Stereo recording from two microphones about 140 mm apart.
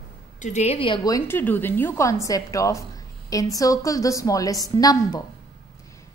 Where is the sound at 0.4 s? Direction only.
55° left (ahead or behind); by 1.0 s 40° left (ahead or behind).